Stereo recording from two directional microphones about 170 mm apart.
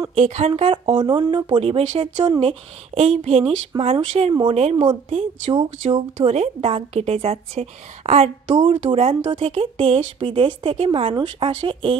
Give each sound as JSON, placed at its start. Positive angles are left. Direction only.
{"t": 0.1, "sound": "a woman's voice", "side_deg": -40}